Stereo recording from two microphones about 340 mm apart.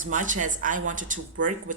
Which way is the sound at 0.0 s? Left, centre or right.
Right.